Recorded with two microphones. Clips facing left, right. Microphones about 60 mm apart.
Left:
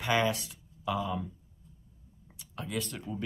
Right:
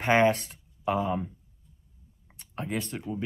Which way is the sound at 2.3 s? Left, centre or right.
Right.